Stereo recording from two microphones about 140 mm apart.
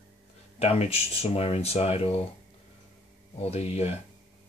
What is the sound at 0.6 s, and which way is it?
Speech, 50° left (ahead or behind).